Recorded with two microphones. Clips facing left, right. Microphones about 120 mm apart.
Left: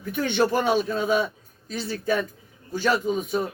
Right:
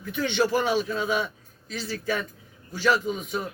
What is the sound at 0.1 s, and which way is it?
Speech, 45° left (ahead or behind).